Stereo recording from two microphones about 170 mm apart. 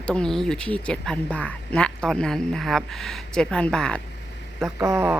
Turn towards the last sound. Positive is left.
turn(degrees=-15)  # may be behind; listen again after turning